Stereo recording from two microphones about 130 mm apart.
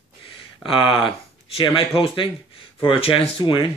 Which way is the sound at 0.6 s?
40° left (ahead or behind).